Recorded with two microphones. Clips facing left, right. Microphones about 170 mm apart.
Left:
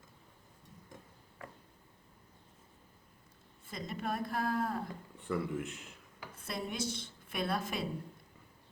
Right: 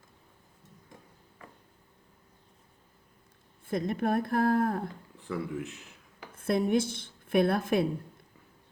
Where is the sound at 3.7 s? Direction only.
55° right (ahead or behind).